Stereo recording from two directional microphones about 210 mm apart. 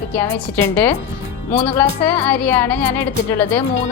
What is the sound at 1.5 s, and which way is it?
Speech, 30° left (ahead or behind).